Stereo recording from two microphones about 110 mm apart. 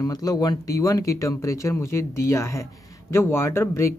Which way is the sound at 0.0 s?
35° left (ahead or behind).